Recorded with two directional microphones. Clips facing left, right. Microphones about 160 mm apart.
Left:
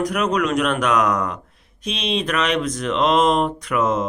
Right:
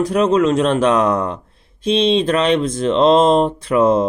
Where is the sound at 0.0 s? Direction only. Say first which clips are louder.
Right 6 dB; 30° right (ahead or behind).